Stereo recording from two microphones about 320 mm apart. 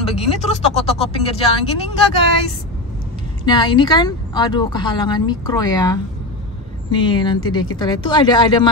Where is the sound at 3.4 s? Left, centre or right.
Centre.